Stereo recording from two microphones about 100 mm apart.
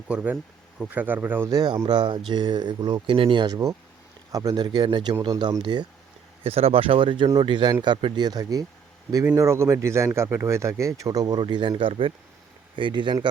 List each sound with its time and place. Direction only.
0.1 s speech: 15° right (ahead or behind)
1.5 s speech: 35° right (ahead or behind)
1.9 s speech: 50° right (ahead or behind)
6.4 s speech: 75° right (ahead or behind); by 11.3 s 40° right (ahead or behind)
11.3 s speech: 50° right (ahead or behind)